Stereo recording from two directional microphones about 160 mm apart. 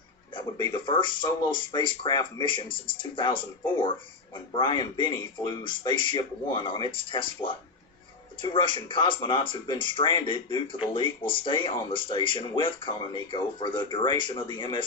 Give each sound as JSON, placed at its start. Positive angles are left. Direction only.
{"t": 0.3, "sound": "speech", "side_deg": 30}